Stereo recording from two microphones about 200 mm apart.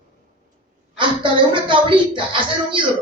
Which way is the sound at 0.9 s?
25° right (ahead or behind).